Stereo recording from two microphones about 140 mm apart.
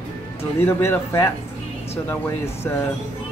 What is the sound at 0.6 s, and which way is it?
Speech, 15° left (ahead or behind).